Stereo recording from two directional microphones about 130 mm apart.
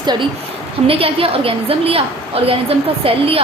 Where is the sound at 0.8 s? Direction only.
45° right (ahead or behind).